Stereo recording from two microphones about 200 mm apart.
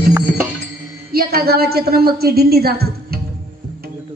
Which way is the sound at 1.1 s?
50° right (ahead or behind).